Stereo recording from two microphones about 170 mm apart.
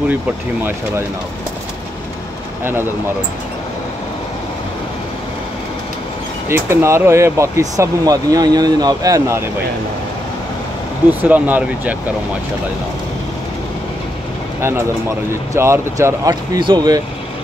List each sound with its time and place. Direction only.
6.5 s speech: 15° right (ahead or behind)
11.1 s speech: 10° right (ahead or behind)
15.5 s speech: 15° right (ahead or behind)